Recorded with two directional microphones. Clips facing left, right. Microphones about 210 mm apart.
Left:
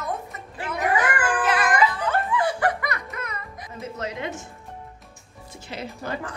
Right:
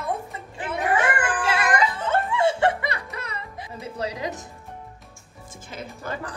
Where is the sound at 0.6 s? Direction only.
25° right (ahead or behind).